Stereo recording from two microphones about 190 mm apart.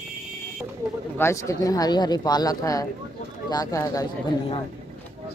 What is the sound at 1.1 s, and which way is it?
Speech, 15° left (ahead or behind).